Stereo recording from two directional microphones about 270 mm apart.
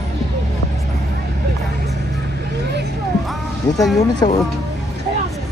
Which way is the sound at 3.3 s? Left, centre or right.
Centre.